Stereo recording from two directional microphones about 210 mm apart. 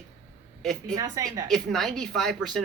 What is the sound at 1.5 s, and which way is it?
Speech, centre (ahead or behind).